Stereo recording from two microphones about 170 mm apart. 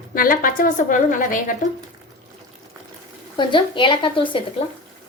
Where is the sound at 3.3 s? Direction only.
30° left (ahead or behind).